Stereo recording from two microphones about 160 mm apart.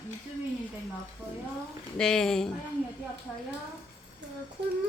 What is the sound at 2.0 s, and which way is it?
Speech, 5° left (ahead or behind).